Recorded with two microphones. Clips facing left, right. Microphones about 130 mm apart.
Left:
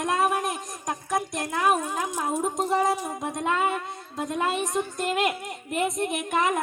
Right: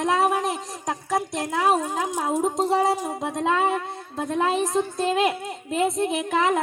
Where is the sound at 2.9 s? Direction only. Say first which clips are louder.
Right 3 dB; 25° right (ahead or behind).